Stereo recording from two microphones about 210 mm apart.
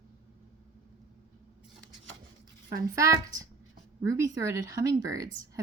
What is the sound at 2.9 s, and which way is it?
Speech, 15° right (ahead or behind).